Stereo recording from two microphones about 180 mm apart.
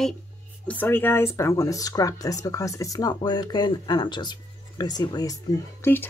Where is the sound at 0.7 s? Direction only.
10° left (ahead or behind).